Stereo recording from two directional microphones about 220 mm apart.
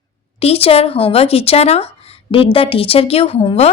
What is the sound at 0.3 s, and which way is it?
Speech, 25° left (ahead or behind).